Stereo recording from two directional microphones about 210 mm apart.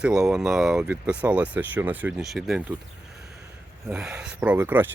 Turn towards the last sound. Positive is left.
turn(degrees=-10)  # may be behind; listen again after turning